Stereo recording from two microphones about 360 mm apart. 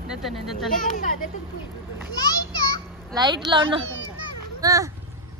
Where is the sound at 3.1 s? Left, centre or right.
Centre.